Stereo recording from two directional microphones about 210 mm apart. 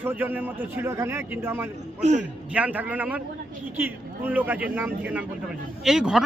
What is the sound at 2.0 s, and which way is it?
Speech, 35° right (ahead or behind).